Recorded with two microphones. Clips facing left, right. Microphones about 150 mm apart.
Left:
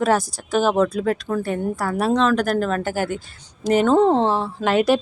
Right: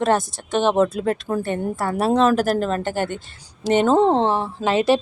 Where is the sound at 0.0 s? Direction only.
Centre (ahead or behind).